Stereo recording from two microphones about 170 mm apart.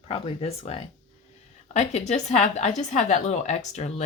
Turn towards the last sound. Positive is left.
turn(degrees=40)  # may be behind; listen again after turning